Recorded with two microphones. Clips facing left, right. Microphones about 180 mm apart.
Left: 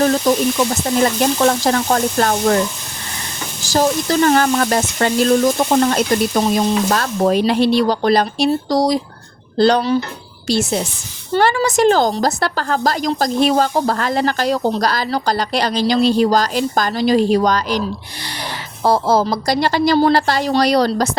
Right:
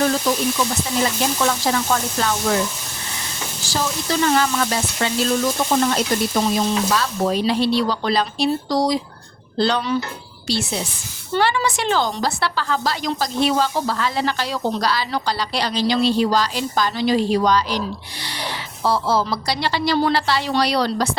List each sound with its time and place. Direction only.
0.0 s speech: 45° left (ahead or behind)
3.7 s speech: 45° left (ahead or behind)